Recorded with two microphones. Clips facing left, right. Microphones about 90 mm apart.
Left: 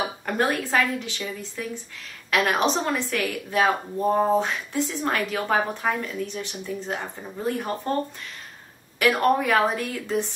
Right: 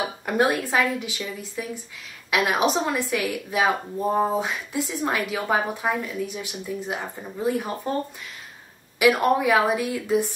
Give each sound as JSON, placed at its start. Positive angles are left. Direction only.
{"t": 0.2, "sound": "speech", "side_deg": -10}
{"t": 9.0, "sound": "speech", "side_deg": -5}